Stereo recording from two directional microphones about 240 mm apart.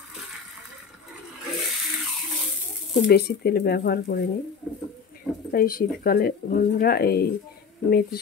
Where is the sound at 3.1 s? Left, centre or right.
Left.